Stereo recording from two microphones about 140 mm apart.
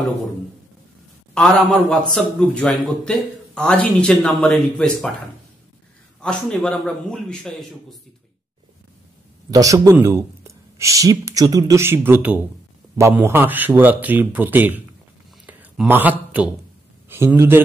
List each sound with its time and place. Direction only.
1.3 s a man's voice: 5° left (ahead or behind)
6.2 s a man's voice: 10° left (ahead or behind)
9.5 s speech: 25° right (ahead or behind)
15.4 s a sound: 10° right (ahead or behind)
17.1 s speech: 15° right (ahead or behind)